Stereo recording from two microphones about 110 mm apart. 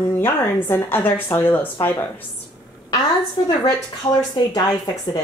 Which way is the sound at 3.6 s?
40° left (ahead or behind).